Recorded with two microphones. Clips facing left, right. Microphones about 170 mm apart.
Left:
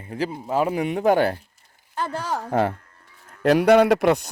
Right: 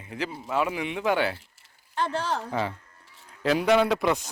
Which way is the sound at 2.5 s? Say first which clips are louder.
Left 7 dB; 50° left (ahead or behind).